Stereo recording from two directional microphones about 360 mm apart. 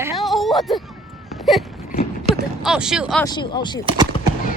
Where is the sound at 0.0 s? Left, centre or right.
Centre.